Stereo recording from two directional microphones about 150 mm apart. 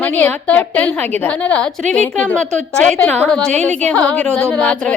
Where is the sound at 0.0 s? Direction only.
10° left (ahead or behind).